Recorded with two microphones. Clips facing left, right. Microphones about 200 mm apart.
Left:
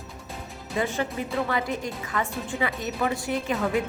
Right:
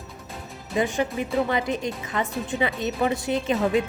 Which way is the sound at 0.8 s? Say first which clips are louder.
Right 3 dB; 15° right (ahead or behind).